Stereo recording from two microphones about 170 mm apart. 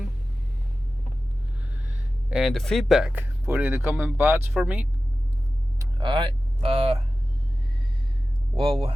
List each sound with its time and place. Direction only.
2.3 s speech: centre (ahead or behind)
5.8 s speech: 30° right (ahead or behind)
8.5 s speech: 30° right (ahead or behind)